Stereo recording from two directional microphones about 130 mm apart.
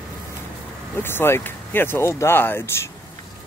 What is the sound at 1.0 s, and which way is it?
Speech, 15° left (ahead or behind).